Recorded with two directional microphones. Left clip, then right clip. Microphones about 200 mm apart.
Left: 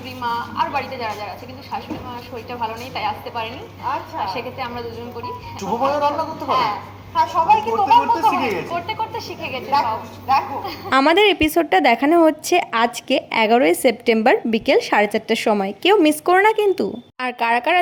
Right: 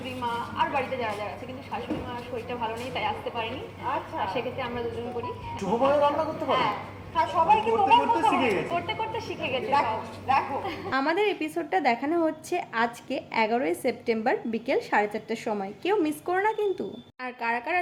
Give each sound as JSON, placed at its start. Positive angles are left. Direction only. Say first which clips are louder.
{"t": 0.2, "sound": "a woman's voice", "louder": "left 6 dB", "side_deg": 20}
{"t": 2.5, "sound": "a woman's voice", "louder": "left 7 dB", "side_deg": 25}
{"t": 10.2, "sound": "laughter", "louder": "left 6 dB", "side_deg": 15}
{"t": 10.8, "sound": "a woman's voice", "louder": "left 12 dB", "side_deg": 45}